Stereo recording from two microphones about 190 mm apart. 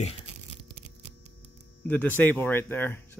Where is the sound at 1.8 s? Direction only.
10° left (ahead or behind).